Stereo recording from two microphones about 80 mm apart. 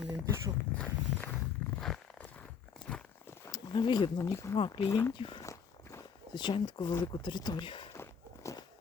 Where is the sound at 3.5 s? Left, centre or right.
Left.